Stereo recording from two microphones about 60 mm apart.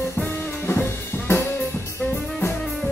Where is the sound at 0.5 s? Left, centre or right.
Left.